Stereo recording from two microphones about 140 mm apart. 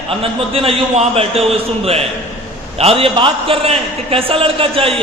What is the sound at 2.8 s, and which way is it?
A man's voice, 45° right (ahead or behind).